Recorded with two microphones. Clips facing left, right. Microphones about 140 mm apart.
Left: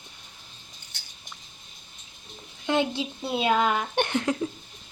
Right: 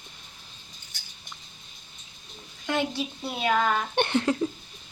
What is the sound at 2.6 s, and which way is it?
A woman's voice, 20° left (ahead or behind).